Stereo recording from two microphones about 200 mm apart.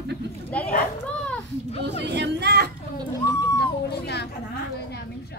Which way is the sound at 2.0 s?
60° right (ahead or behind).